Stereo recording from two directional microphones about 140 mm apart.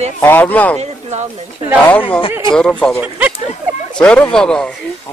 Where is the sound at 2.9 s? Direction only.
10° right (ahead or behind).